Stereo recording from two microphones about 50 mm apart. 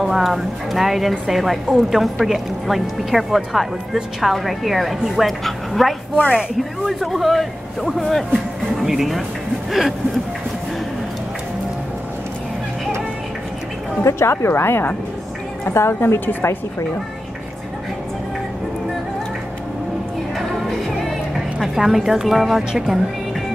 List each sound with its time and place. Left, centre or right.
0.0 s a woman's voice: centre
8.7 s a woman's voice: centre
14.0 s speech: left
15.6 s speech: left
20.3 s music: centre
21.5 s a woman's voice: centre